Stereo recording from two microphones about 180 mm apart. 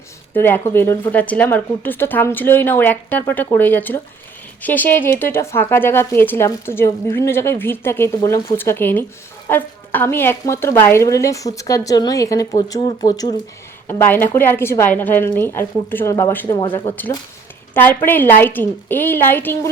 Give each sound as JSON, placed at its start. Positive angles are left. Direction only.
{"t": 0.3, "sound": "a woman's voice", "side_deg": 10}